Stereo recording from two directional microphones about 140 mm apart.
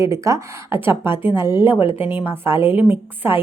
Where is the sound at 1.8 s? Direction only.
40° left (ahead or behind).